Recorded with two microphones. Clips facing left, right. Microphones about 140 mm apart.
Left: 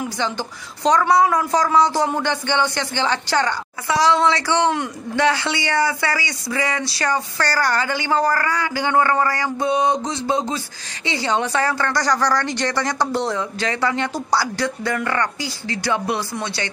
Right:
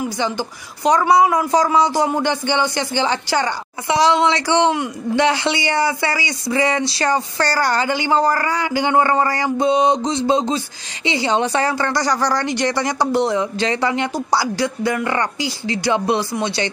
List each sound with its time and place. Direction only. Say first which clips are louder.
0.2 s speech: right 2 dB; 10° right (ahead or behind)